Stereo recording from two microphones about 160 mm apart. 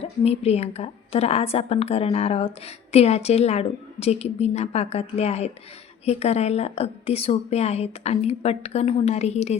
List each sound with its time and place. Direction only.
0.0 s a woman's voice: 40° left (ahead or behind)